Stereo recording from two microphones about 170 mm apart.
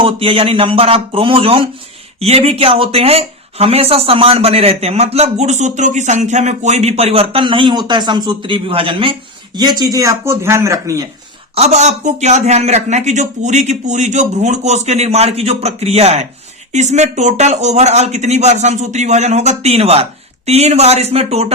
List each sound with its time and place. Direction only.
0.0 s speech: 35° right (ahead or behind)
11.5 s speech: 40° right (ahead or behind)